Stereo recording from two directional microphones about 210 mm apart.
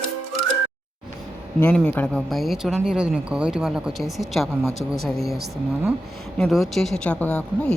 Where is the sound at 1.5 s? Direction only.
5° left (ahead or behind).